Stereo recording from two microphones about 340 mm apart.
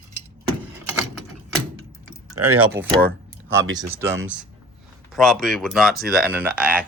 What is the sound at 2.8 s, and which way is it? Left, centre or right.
Speech, centre.